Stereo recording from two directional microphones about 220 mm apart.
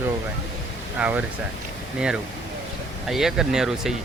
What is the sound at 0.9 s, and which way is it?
Speech, 5° right (ahead or behind).